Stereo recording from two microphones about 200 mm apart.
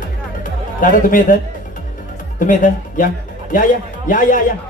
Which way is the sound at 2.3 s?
40° left (ahead or behind).